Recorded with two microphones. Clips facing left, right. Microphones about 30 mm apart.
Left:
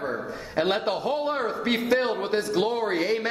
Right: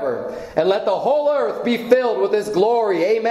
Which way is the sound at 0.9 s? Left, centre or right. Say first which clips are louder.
Right 9 dB; left.